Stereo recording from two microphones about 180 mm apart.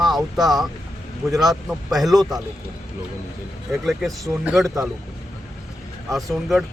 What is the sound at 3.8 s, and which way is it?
Speech, centre (ahead or behind).